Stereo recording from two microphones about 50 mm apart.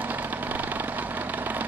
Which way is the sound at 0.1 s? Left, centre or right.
Right.